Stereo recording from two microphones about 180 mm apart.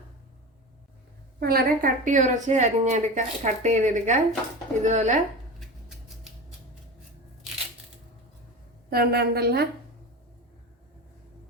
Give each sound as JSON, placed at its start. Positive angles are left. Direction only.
{"t": 1.4, "sound": "a woman's voice", "side_deg": -55}
{"t": 8.9, "sound": "a woman's voice", "side_deg": -60}